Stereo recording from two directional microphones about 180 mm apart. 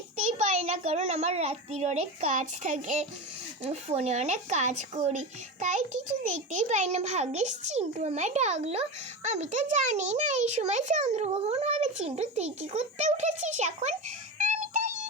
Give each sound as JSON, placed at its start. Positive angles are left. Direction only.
{"t": 0.3, "sound": "a child's voice", "side_deg": -40}
{"t": 14.3, "sound": "music", "side_deg": -40}